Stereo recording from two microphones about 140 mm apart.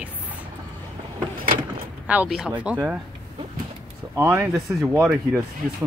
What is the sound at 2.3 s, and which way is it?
Speech, 5° right (ahead or behind).